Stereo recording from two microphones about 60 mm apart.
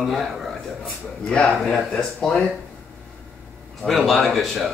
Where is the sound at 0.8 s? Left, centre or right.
Centre.